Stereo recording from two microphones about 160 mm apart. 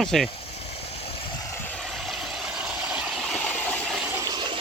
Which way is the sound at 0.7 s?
40° left (ahead or behind).